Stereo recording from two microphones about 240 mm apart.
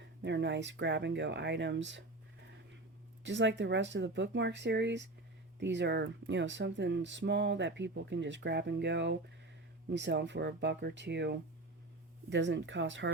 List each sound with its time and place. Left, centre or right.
0.0 s speech: right
3.2 s speech: right